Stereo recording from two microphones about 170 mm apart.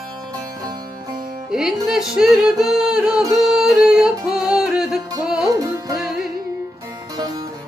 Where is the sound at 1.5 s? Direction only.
5° right (ahead or behind).